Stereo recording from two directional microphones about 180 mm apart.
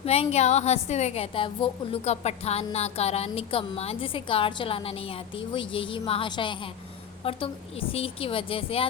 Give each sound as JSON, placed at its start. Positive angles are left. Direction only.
{"t": 0.0, "sound": "a woman's voice", "side_deg": 35}